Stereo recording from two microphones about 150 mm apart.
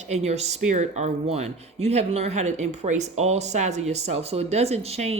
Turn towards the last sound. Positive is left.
turn(degrees=-45)  # may be behind; listen again after turning